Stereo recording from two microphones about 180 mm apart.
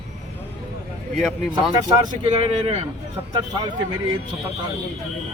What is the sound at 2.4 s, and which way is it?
Speech, 35° right (ahead or behind).